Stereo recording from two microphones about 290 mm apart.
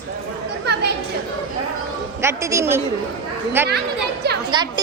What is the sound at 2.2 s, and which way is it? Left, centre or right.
A man's voice, centre.